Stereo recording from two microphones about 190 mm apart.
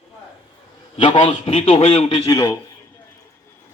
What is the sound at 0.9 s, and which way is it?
Speech, 25° left (ahead or behind).